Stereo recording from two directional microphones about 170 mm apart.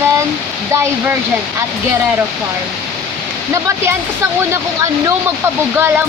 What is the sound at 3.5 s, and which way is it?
Speech, 15° right (ahead or behind).